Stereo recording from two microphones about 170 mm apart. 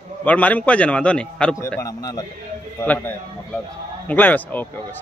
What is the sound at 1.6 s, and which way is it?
Speech, 15° left (ahead or behind).